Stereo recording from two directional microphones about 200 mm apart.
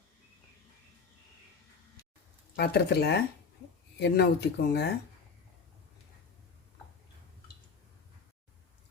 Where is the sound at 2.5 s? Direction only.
55° left (ahead or behind).